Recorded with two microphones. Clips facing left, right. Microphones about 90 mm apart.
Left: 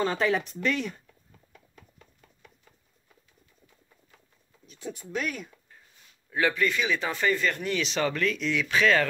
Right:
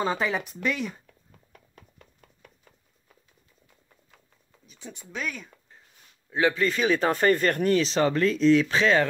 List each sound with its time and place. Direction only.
0.0 s speech: 5° right (ahead or behind)
4.6 s speech: centre (ahead or behind)
6.3 s speech: 25° right (ahead or behind)